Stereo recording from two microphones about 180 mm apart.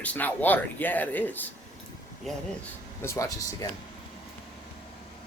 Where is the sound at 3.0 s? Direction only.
15° left (ahead or behind).